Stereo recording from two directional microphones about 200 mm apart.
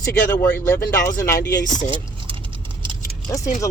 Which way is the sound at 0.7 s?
15° left (ahead or behind).